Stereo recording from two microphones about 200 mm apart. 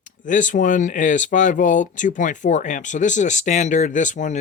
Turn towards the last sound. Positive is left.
turn(degrees=40)  # may be behind; listen again after turning